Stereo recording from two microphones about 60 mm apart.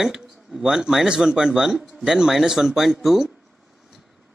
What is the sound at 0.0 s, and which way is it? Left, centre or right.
Speech, centre.